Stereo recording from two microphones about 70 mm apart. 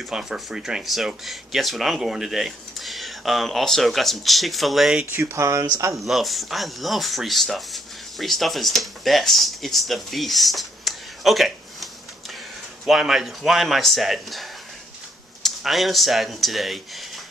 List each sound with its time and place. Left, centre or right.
0.0 s speech: centre
5.1 s speech: right
6.0 s speech: centre